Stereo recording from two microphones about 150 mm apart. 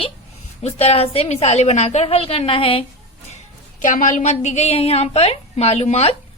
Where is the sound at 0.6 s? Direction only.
45° left (ahead or behind).